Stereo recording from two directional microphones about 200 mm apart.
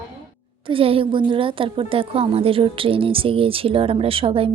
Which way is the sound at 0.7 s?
25° right (ahead or behind).